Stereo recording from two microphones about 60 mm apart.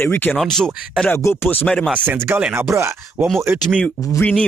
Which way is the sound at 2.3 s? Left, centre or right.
Right.